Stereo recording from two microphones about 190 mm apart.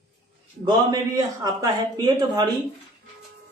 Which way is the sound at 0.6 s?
20° right (ahead or behind).